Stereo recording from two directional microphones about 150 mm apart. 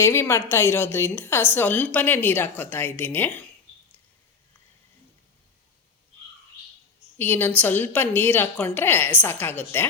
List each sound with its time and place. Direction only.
0.0 s a woman's voice: 15° left (ahead or behind)
7.2 s a woman's voice: 15° left (ahead or behind)